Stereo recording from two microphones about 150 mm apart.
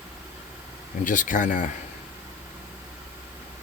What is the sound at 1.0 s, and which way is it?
Speech, 60° left (ahead or behind).